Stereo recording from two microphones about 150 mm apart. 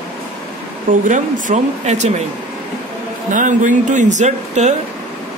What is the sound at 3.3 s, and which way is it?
Speech, 60° right (ahead or behind).